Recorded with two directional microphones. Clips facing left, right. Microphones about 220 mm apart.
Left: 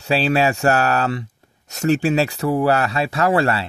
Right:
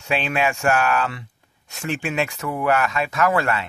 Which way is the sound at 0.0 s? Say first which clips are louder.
Left 5 dB; 35° left (ahead or behind).